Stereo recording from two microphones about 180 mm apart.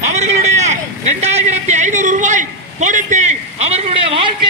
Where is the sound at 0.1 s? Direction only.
35° right (ahead or behind).